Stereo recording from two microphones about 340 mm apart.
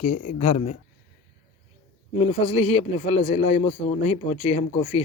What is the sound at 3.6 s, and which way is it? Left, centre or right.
Speech, centre.